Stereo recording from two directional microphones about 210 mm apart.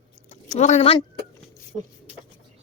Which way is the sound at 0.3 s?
35° left (ahead or behind).